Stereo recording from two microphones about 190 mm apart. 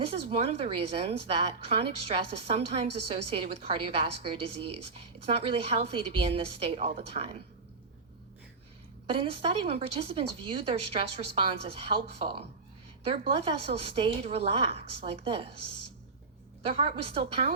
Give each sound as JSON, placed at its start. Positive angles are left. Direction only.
{"t": 0.1, "sound": "a woman's voice", "side_deg": -30}
{"t": 9.0, "sound": "speech", "side_deg": -30}
{"t": 16.6, "sound": "speech", "side_deg": -30}